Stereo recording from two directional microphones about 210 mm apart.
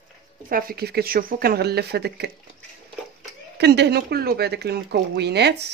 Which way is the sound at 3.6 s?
55° right (ahead or behind).